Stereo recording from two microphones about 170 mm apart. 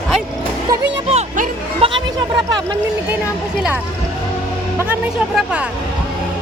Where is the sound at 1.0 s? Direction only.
35° right (ahead or behind).